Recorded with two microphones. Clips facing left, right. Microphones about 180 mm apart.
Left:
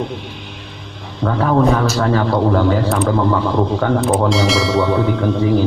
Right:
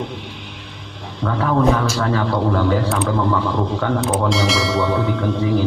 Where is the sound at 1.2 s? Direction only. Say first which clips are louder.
Left 3 dB; 40° left (ahead or behind).